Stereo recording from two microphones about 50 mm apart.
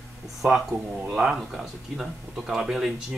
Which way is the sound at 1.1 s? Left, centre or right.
Centre.